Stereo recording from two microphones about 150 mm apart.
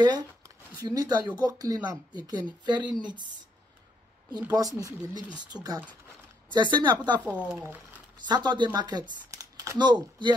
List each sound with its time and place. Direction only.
0.7 s speech: 25° right (ahead or behind)
4.4 s speech: 25° right (ahead or behind)
5.2 s speech: 5° right (ahead or behind)
5.5 s speech: 25° right (ahead or behind)
7.2 s speech: 10° right (ahead or behind)
8.3 s speech: 30° right (ahead or behind)